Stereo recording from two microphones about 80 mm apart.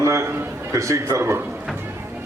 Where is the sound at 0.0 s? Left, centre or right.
Right.